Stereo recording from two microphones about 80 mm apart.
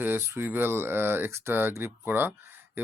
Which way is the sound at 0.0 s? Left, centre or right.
Right.